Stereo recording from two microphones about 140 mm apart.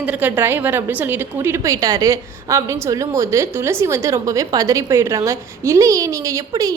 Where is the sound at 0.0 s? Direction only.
10° right (ahead or behind).